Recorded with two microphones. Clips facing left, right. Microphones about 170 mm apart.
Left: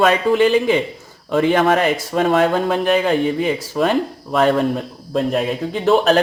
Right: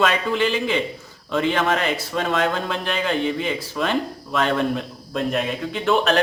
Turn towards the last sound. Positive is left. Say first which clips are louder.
# left 5 dB
turn(degrees=40)  # may be behind; listen again after turning